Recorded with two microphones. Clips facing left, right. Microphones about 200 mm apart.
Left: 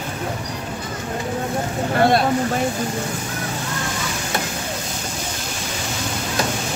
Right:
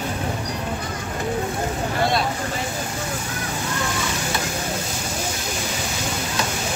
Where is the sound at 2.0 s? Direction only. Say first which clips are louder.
Left 6 dB; 55° left (ahead or behind).